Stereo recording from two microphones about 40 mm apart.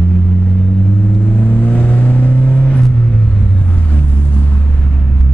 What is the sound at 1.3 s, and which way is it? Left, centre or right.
Vehicle, left.